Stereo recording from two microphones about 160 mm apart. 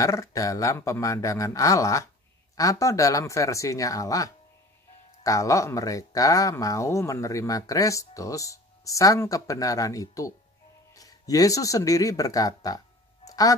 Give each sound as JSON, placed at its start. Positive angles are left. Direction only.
{"t": 0.0, "sound": "speech", "side_deg": 20}